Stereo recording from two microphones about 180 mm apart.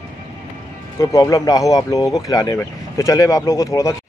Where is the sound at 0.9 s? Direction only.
20° left (ahead or behind).